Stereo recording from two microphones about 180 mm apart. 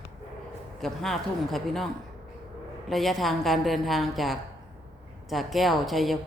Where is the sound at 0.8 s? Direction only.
Centre (ahead or behind).